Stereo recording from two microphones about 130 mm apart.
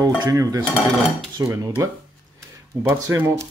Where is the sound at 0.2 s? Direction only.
25° right (ahead or behind).